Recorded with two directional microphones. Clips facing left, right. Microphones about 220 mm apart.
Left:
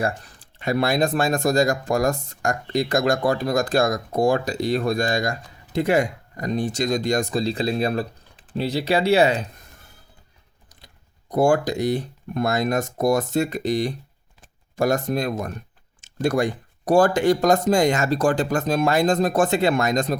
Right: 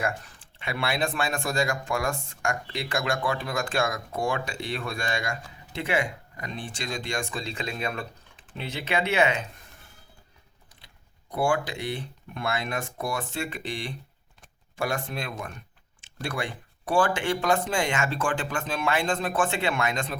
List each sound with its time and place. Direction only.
0.0 s speech: 40° left (ahead or behind)
10.8 s speech: 40° left (ahead or behind)